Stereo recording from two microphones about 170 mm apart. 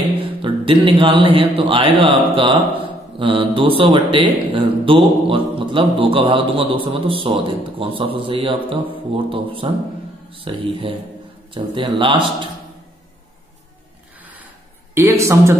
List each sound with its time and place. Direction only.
0.4 s a man's voice: 30° right (ahead or behind)
15.0 s speech: 15° right (ahead or behind)